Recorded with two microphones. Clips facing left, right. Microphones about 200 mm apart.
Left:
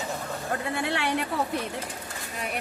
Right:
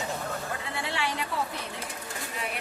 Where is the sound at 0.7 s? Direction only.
55° left (ahead or behind).